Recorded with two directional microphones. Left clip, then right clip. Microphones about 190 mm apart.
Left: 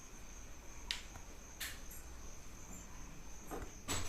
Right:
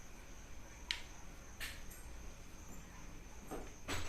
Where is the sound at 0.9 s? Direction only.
35° right (ahead or behind).